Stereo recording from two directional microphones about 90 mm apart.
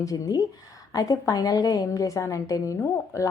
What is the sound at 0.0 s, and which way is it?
A woman's voice, 40° left (ahead or behind).